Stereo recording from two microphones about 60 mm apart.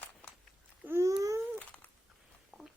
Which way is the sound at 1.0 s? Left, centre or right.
Right.